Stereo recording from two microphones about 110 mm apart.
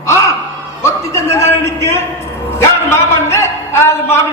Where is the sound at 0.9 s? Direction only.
25° left (ahead or behind).